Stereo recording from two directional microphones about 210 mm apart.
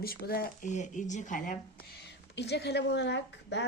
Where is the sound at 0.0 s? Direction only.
45° left (ahead or behind).